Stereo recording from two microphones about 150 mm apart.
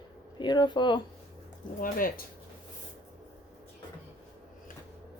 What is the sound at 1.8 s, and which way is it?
Speech, 70° left (ahead or behind).